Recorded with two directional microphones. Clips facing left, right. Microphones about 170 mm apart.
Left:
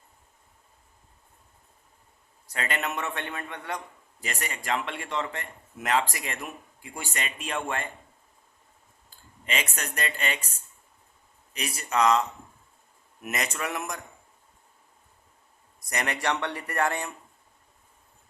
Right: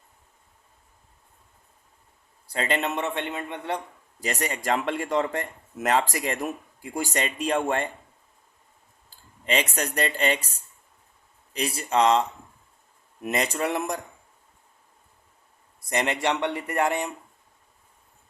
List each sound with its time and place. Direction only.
2.5 s a man's voice: 30° right (ahead or behind)
4.2 s speech: 40° right (ahead or behind)
9.0 s speech: 35° right (ahead or behind)
11.5 s a man's voice: 30° right (ahead or behind)
13.2 s speech: 30° right (ahead or behind)
15.9 s a man's voice: 25° right (ahead or behind)